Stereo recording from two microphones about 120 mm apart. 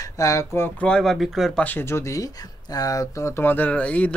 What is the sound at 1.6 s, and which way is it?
Speech, 15° left (ahead or behind).